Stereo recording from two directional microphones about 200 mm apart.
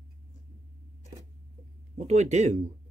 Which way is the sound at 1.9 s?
35° right (ahead or behind).